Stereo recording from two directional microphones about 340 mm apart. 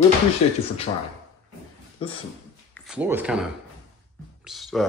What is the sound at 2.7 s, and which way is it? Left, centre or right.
Speech, centre.